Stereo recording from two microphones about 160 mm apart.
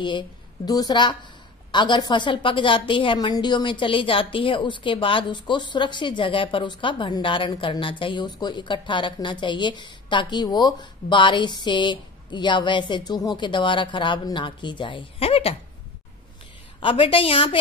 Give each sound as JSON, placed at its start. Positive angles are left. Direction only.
{"t": 0.7, "sound": "a woman's voice", "side_deg": 25}
{"t": 16.8, "sound": "a woman's voice", "side_deg": 35}